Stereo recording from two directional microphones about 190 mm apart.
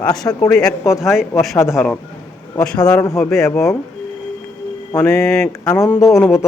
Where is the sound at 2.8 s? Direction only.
20° left (ahead or behind).